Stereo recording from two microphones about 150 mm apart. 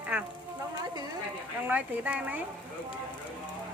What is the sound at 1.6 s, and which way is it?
Speech, 10° right (ahead or behind).